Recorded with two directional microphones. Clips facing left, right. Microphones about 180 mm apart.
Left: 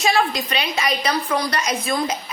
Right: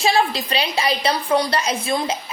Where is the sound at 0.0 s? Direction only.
30° right (ahead or behind).